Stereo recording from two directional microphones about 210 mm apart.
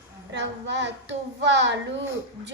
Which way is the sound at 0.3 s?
55° right (ahead or behind).